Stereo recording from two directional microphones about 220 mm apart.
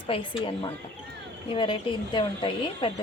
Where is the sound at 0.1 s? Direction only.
25° left (ahead or behind).